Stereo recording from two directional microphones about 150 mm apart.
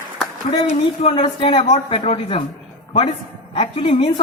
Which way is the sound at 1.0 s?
40° left (ahead or behind).